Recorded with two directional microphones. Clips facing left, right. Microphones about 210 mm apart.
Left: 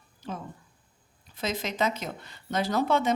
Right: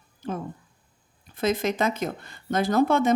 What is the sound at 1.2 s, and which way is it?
Speech, 55° right (ahead or behind).